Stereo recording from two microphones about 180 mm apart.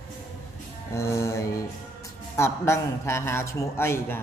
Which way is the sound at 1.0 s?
15° left (ahead or behind).